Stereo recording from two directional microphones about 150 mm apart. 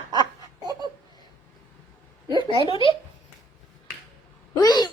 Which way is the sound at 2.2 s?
30° right (ahead or behind).